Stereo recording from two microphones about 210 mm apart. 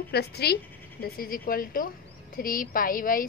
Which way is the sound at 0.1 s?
50° left (ahead or behind).